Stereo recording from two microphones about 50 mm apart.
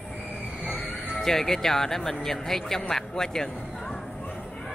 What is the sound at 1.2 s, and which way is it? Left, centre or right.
Speech, centre.